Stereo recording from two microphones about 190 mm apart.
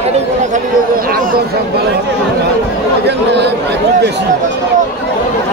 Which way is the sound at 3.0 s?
65° right (ahead or behind).